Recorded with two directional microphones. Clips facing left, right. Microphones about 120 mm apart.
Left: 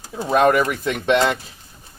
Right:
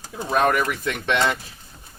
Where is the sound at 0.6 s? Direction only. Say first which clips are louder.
Left 3 dB; 45° left (ahead or behind).